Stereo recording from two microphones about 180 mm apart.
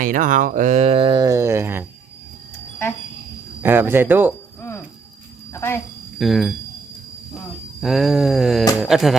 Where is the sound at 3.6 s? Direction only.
10° right (ahead or behind).